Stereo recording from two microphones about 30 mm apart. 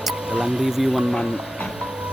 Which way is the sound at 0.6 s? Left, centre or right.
Centre.